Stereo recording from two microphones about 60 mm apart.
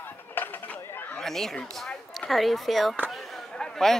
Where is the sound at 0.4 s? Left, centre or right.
Left.